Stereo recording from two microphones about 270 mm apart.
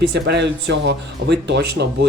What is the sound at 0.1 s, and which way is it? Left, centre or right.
Speech, right.